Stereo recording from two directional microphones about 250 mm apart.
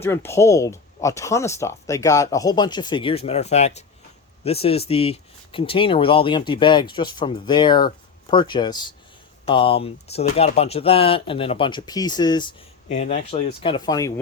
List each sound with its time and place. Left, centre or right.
0.0 s speech: centre